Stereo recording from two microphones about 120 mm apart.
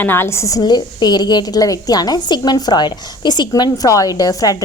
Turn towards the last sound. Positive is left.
turn(degrees=30)  # may be behind; listen again after turning